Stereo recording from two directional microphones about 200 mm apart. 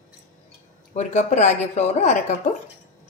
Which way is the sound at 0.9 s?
35° left (ahead or behind).